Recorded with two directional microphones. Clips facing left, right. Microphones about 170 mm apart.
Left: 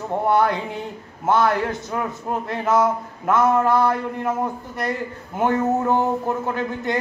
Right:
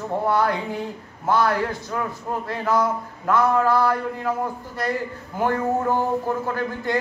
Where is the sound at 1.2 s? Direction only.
25° left (ahead or behind).